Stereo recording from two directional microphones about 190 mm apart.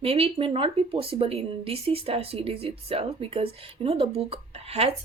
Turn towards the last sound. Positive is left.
turn(degrees=-30)  # may be behind; listen again after turning